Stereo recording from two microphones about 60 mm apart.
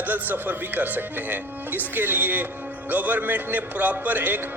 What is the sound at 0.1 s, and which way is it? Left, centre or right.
A man's voice, right.